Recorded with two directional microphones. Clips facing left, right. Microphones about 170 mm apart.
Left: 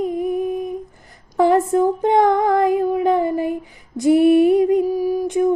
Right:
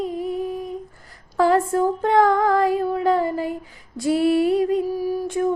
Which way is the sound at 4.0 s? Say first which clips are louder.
Left 6 dB; 20° left (ahead or behind).